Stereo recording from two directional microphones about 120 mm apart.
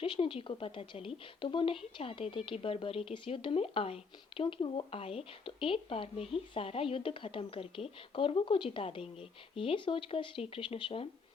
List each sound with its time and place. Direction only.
0.0 s a woman's voice: 45° left (ahead or behind)